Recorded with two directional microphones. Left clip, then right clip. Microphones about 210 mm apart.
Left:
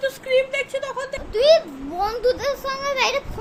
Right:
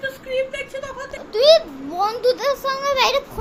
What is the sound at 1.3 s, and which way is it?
A child's voice, 5° right (ahead or behind).